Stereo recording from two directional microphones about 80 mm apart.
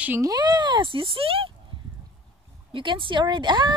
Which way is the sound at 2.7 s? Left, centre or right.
Right.